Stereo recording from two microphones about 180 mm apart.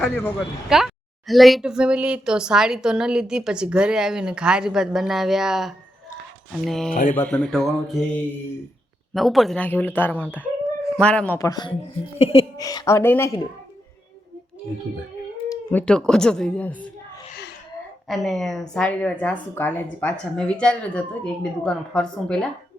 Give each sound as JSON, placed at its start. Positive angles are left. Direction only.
{"t": 0.0, "sound": "a woman's voice", "side_deg": 10}
{"t": 6.9, "sound": "speech", "side_deg": 45}
{"t": 7.2, "sound": "a woman's voice", "side_deg": 5}
{"t": 11.3, "sound": "speech", "side_deg": 20}
{"t": 12.5, "sound": "speech", "side_deg": 20}
{"t": 15.4, "sound": "a woman's voice", "side_deg": 5}
{"t": 18.1, "sound": "a woman's voice", "side_deg": 0}